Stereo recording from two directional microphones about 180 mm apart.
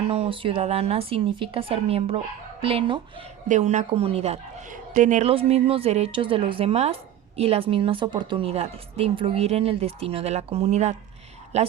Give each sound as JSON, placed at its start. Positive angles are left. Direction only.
{"t": 0.1, "sound": "speech", "side_deg": -30}
{"t": 3.5, "sound": "speech", "side_deg": -40}